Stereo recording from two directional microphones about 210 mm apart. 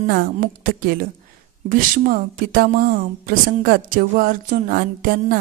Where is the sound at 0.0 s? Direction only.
45° right (ahead or behind).